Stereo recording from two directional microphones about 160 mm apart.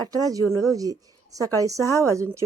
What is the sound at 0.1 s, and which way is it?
A woman's voice, 25° right (ahead or behind).